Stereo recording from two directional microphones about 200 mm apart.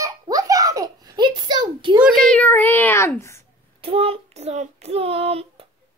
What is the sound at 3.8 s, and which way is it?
Child singing, 30° right (ahead or behind).